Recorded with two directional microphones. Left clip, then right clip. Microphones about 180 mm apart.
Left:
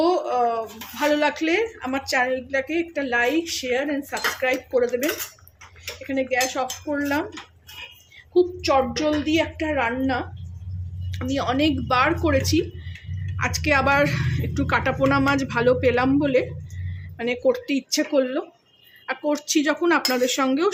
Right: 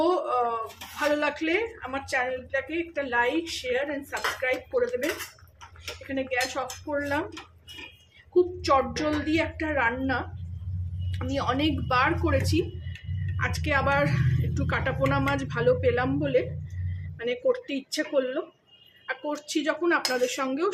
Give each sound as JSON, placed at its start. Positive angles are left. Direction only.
{"t": 0.0, "sound": "speech", "side_deg": 25}
{"t": 6.1, "sound": "speech", "side_deg": 25}
{"t": 7.0, "sound": "speech", "side_deg": 30}
{"t": 9.0, "sound": "speech", "side_deg": 20}